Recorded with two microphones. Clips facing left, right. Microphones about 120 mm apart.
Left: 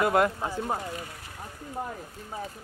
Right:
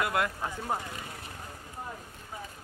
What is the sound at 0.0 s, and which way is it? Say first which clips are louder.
Speech: left 6 dB; 40° left (ahead or behind).